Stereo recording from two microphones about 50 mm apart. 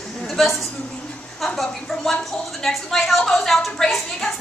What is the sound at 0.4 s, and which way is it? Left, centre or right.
A woman's voice, centre.